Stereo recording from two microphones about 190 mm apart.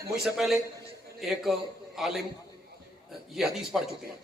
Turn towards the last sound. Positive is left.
turn(degrees=0)  # may be behind; listen again after turning